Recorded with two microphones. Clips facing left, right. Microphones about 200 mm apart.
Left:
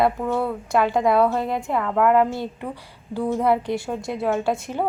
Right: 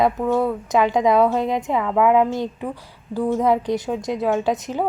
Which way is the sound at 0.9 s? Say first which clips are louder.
Right 2 dB; 5° left (ahead or behind).